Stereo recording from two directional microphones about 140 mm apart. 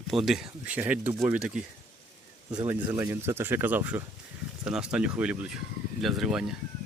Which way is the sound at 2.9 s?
15° right (ahead or behind).